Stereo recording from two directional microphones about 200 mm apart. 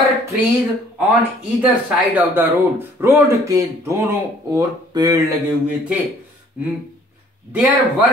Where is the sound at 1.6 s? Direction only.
10° right (ahead or behind).